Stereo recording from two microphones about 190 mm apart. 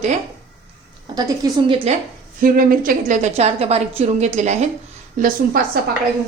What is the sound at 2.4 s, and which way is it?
A woman's voice, 50° right (ahead or behind).